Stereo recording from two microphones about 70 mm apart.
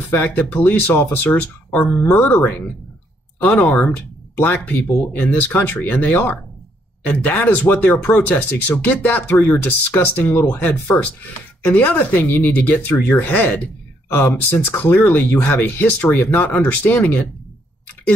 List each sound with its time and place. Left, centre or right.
0.1 s speech: left